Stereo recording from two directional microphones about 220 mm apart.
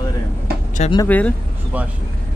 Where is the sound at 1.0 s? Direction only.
5° left (ahead or behind).